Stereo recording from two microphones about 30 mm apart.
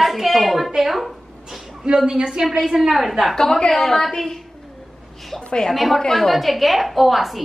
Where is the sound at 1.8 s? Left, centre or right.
Right.